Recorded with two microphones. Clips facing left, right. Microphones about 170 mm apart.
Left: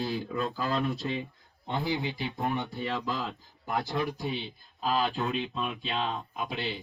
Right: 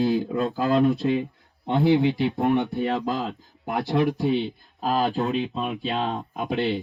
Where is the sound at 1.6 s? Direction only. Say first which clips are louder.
Right 11 dB; 70° right (ahead or behind).